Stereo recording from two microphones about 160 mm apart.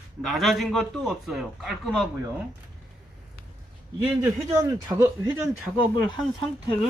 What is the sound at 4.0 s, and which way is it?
A man's voice, 15° right (ahead or behind).